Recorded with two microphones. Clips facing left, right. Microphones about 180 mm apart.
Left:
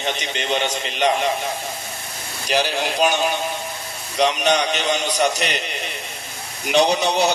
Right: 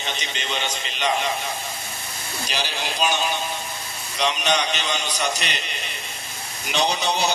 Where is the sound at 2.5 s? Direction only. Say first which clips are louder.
Left 9 dB; 60° left (ahead or behind).